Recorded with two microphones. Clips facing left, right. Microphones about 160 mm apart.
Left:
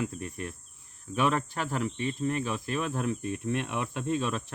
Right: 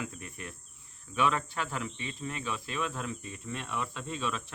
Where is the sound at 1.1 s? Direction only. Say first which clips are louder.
Left 2 dB; 45° left (ahead or behind).